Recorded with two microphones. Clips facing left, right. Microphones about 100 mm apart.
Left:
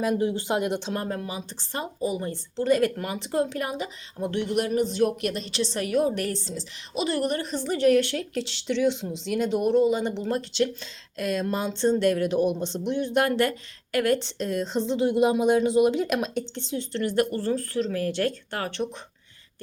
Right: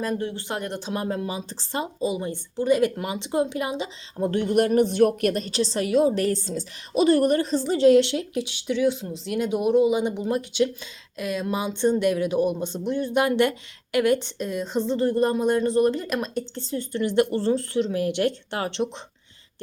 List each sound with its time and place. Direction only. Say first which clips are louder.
0.2 s speech: left 4 dB; 15° left (ahead or behind)
0.7 s speech: left 1 dB; 5° right (ahead or behind)
1.0 s speech: right 3 dB; 20° right (ahead or behind)
1.5 s speech: right 4 dB; 35° right (ahead or behind)
2.1 s a woman's voice: right 1 dB; 15° right (ahead or behind)
4.2 s a woman's voice: right 5 dB; 40° right (ahead or behind); by 12.5 s 5° right (ahead or behind)
12.6 s speech: right 1 dB; 50° right (ahead or behind)
12.9 s a woman's voice: right 1 dB; 5° right (ahead or behind)
17.1 s speech: right 4 dB; 25° right (ahead or behind)